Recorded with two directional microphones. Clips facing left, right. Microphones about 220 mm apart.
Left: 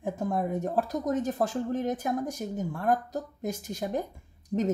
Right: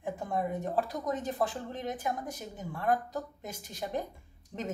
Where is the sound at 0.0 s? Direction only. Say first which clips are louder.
Left 4 dB; 45° left (ahead or behind).